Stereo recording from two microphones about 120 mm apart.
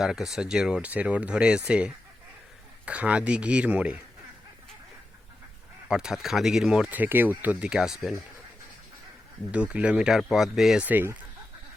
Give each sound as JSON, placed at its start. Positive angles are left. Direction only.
{"t": 0.0, "sound": "speech", "side_deg": -5}
{"t": 5.9, "sound": "speech", "side_deg": -5}
{"t": 9.5, "sound": "speech", "side_deg": -10}
{"t": 10.8, "sound": "speech", "side_deg": -15}